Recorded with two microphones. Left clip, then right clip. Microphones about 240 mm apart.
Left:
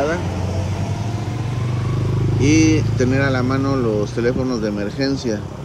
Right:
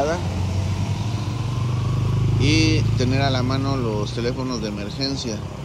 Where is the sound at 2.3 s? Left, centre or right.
Centre.